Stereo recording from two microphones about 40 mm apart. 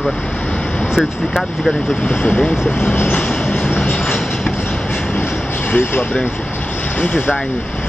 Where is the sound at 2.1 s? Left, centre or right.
Left.